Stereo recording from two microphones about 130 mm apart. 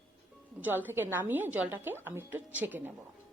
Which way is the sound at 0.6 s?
15° right (ahead or behind).